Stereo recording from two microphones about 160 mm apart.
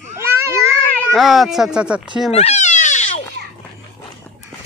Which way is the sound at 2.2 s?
40° left (ahead or behind).